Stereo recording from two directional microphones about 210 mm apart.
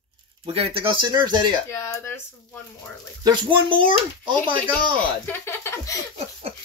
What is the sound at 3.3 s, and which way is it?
Speech, 25° right (ahead or behind).